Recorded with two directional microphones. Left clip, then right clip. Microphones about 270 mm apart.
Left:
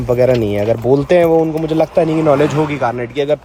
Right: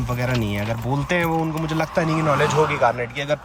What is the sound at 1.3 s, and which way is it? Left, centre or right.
Speech, right.